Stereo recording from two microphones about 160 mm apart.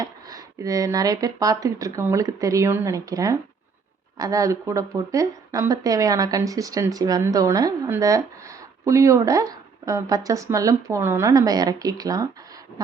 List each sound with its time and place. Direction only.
0.0 s speech: 20° right (ahead or behind)